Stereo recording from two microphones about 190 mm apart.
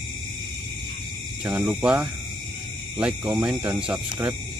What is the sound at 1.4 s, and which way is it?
Speech, 5° right (ahead or behind).